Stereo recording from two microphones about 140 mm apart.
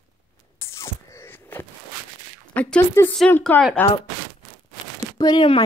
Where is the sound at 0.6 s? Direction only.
20° left (ahead or behind).